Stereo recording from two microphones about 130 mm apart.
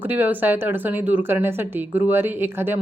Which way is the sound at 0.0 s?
15° right (ahead or behind).